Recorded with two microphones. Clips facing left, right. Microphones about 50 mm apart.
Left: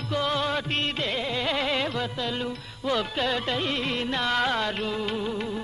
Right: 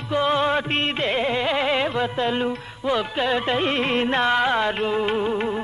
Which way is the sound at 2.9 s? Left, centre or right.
Centre.